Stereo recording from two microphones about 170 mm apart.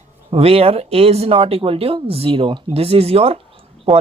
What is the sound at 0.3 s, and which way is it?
Speech, 35° right (ahead or behind).